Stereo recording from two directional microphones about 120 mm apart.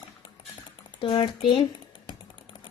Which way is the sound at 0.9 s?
40° left (ahead or behind).